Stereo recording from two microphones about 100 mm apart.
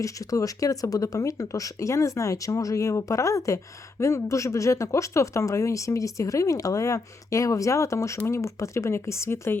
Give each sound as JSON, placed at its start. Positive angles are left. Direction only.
{"t": 0.0, "sound": "speech", "side_deg": 35}